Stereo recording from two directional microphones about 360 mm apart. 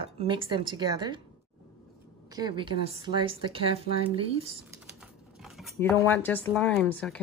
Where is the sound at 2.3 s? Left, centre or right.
Centre.